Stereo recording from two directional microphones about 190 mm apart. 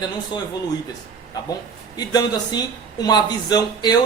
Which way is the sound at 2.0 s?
20° left (ahead or behind).